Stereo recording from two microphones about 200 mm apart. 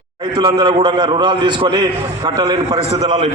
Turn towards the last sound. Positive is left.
turn(degrees=-30)  # may be behind; listen again after turning